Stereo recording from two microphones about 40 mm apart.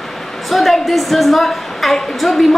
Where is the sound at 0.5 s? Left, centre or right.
Centre.